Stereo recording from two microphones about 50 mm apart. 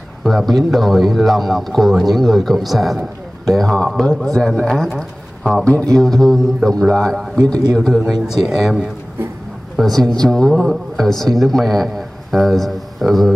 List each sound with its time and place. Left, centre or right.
0.2 s a man's voice: centre
5.9 s a man's voice: centre
8.1 s a man's voice: centre
9.8 s speech: centre